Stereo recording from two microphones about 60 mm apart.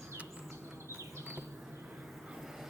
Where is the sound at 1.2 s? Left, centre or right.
Right.